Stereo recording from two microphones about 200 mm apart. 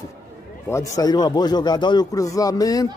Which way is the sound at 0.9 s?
20° left (ahead or behind).